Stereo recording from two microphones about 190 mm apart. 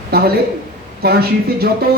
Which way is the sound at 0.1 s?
55° right (ahead or behind).